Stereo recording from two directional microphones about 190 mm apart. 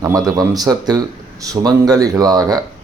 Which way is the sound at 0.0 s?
20° right (ahead or behind).